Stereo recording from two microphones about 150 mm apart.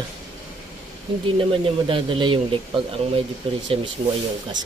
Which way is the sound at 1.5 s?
35° right (ahead or behind).